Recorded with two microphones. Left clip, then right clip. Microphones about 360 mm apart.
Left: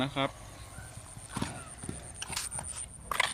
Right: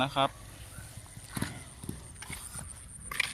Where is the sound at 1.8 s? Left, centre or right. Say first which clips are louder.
Even; left.